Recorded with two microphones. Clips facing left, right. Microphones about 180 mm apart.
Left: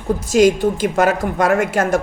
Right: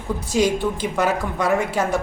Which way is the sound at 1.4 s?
90° left.